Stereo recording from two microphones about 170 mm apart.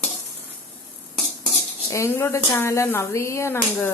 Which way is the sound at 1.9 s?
15° left (ahead or behind).